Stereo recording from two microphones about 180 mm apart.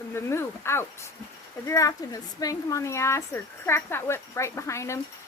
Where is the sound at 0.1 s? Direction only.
15° left (ahead or behind).